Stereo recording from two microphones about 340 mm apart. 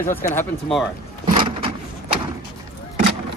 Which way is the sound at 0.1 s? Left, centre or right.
Centre.